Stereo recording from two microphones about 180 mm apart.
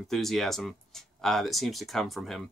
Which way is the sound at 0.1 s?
Centre (ahead or behind).